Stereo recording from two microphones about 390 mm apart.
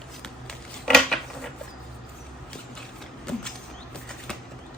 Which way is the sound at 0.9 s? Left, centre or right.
Centre.